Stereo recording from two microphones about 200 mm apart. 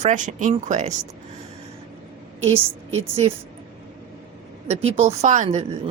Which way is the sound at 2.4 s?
30° right (ahead or behind).